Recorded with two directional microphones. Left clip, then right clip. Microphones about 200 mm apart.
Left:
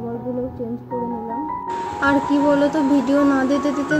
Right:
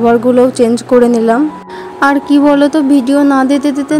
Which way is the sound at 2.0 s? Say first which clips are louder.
Right 9 dB; 55° right (ahead or behind).